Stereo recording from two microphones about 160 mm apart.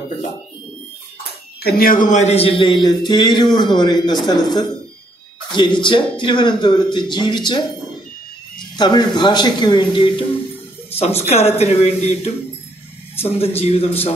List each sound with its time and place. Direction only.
1.6 s speech: 65° left (ahead or behind); by 7.6 s 30° left (ahead or behind)
8.7 s speech: 25° left (ahead or behind)